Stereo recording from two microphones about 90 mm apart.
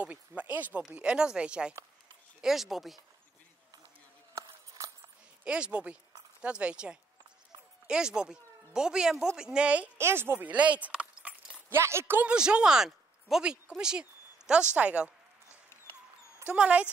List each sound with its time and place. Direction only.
0.0 s speech: 15° right (ahead or behind)
4.4 s a sound: 35° right (ahead or behind)
5.4 s speech: 10° right (ahead or behind)
9.9 s speech: 25° right (ahead or behind)
11.7 s speech: 30° right (ahead or behind)
12.3 s speech: 10° right (ahead or behind)
15.4 s mouse: 30° left (ahead or behind)
16.4 s speech: 15° right (ahead or behind)